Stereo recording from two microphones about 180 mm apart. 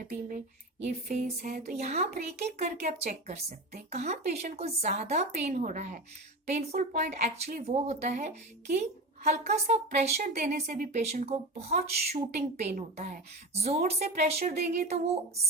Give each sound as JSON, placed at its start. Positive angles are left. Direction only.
{"t": 1.1, "sound": "a woman's voice", "side_deg": -40}
{"t": 11.2, "sound": "a woman's voice", "side_deg": -35}